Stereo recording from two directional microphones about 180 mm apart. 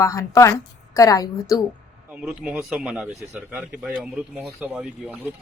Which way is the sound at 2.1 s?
5° right (ahead or behind).